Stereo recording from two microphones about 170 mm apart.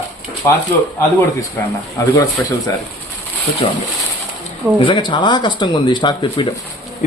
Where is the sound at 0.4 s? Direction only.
15° left (ahead or behind).